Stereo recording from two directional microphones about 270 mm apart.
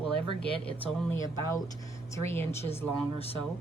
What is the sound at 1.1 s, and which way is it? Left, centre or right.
Speech, centre.